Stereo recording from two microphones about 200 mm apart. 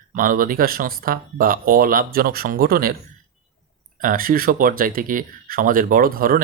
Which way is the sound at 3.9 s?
45° right (ahead or behind).